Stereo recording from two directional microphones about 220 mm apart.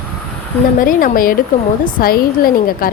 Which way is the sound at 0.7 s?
40° left (ahead or behind).